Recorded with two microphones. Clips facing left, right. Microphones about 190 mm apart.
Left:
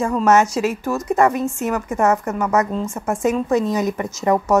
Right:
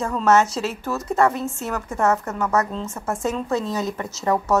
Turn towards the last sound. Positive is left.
turn(degrees=15)  # may be behind; listen again after turning